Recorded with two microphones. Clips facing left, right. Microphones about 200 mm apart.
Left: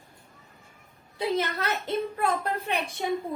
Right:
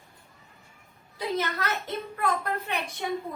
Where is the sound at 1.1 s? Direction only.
30° left (ahead or behind).